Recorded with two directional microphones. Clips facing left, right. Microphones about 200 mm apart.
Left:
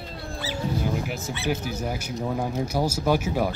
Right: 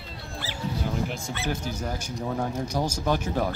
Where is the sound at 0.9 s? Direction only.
5° left (ahead or behind).